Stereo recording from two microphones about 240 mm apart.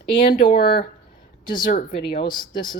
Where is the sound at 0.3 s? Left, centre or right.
Left.